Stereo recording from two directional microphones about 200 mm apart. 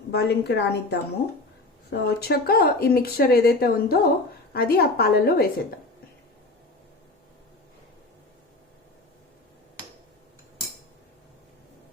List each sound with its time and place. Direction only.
0.1 s a woman's voice: 55° left (ahead or behind)